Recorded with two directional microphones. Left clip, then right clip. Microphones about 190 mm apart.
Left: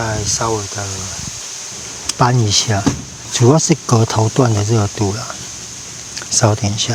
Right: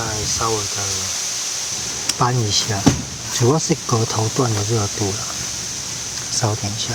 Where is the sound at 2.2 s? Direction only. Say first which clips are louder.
Left 5 dB; 50° left (ahead or behind).